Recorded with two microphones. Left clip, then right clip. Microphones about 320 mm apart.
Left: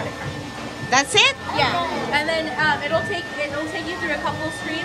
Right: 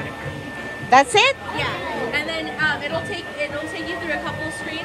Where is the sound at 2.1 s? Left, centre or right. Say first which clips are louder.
Left 3 dB; left.